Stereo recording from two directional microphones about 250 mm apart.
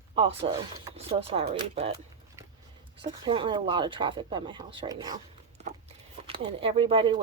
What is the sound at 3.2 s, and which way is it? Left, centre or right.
Speech, centre.